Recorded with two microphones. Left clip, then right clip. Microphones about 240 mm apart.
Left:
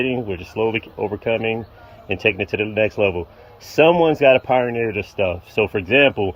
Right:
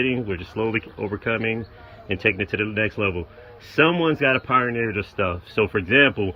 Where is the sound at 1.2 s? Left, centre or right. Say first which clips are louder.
Left 3 dB; centre.